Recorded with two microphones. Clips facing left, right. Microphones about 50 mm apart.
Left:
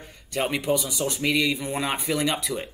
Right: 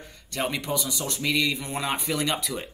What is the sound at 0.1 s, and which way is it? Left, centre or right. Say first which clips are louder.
Speech: left 3 dB; centre.